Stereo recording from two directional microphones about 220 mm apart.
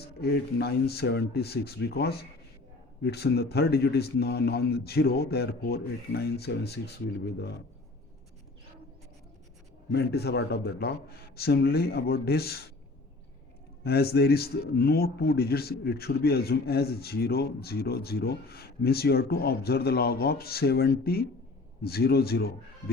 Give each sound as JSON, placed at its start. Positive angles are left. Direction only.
{"t": 0.2, "sound": "a man's voice", "side_deg": 45}
{"t": 9.9, "sound": "a man's voice", "side_deg": 50}
{"t": 13.8, "sound": "a man's voice", "side_deg": 45}